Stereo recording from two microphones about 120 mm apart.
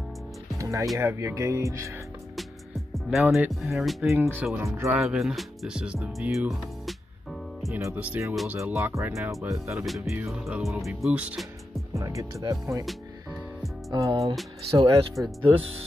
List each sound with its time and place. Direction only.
0.6 s music: 25° right (ahead or behind)
0.9 s speech: 25° right (ahead or behind)
2.9 s music: centre (ahead or behind)
3.6 s speech: centre (ahead or behind)
4.1 s speech: 15° right (ahead or behind)
4.9 s speech: 5° right (ahead or behind)
7.8 s speech: 15° right (ahead or behind)
8.9 s speech: 25° right (ahead or behind)
9.8 s speech: centre (ahead or behind)
11.9 s speech: 25° right (ahead or behind)
13.8 s speech: 30° right (ahead or behind)
14.7 s speech: 55° right (ahead or behind)